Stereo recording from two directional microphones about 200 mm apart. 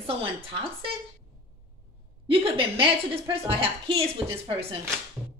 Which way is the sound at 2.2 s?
25° right (ahead or behind).